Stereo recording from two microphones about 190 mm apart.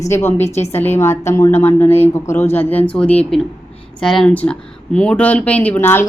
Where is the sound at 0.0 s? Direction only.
15° left (ahead or behind).